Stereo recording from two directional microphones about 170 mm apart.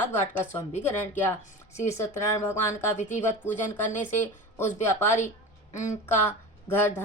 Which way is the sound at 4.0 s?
15° left (ahead or behind).